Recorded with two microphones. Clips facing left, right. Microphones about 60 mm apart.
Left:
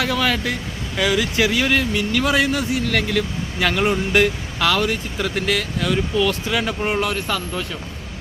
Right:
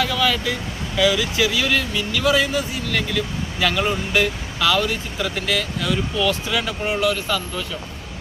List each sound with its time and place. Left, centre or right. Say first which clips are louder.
0.0 s speech: even; left
3.1 s speech: left 2 dB; left
6.1 s speech: left 1 dB; left
7.0 s speech: right 1 dB; left